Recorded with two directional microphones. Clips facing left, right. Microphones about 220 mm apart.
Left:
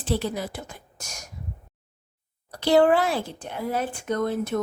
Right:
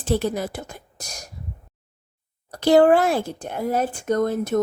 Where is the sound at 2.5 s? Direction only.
45° right (ahead or behind).